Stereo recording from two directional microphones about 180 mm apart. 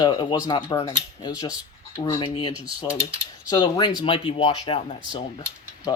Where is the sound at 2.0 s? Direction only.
25° left (ahead or behind).